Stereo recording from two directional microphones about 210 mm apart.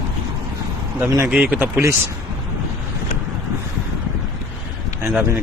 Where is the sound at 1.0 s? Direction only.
10° right (ahead or behind).